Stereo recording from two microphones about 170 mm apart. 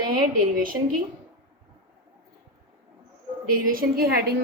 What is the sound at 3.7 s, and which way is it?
Speech, 65° right (ahead or behind).